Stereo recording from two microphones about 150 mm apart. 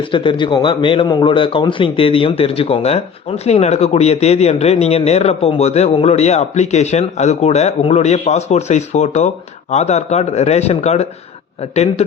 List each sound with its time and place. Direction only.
0.1 s a man's voice: 35° left (ahead or behind)